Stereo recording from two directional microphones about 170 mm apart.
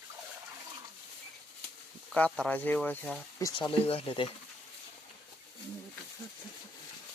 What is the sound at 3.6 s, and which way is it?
Speech, 30° left (ahead or behind).